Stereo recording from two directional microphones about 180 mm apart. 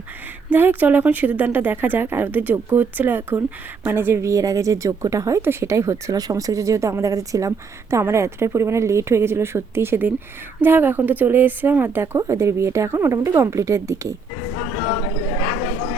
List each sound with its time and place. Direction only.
0.5 s a woman's voice: 10° right (ahead or behind)